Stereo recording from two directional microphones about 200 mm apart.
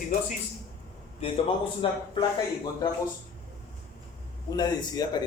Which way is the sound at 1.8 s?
25° left (ahead or behind).